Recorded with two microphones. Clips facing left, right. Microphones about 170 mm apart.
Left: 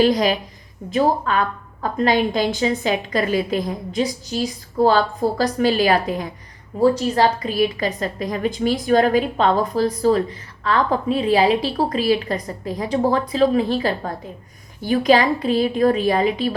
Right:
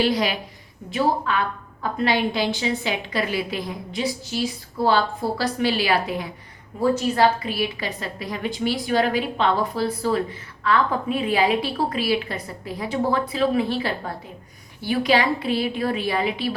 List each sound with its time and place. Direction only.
0.0 s a woman's voice: 40° left (ahead or behind)